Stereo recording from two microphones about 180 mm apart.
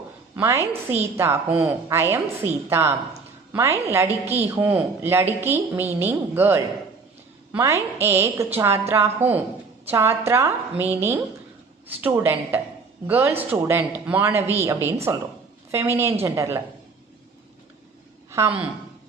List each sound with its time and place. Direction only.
0.3 s a woman's voice: 15° right (ahead or behind)
4.1 s a woman's voice: 35° right (ahead or behind)
4.4 s a woman's voice: 10° right (ahead or behind)
18.3 s a sound: 15° right (ahead or behind)